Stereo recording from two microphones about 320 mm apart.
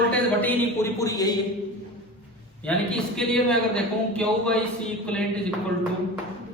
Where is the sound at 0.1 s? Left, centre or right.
Centre.